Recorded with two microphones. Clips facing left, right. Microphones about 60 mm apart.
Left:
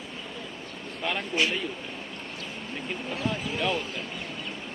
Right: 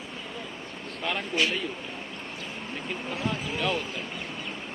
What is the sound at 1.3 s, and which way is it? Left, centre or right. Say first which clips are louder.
Speech: even; left.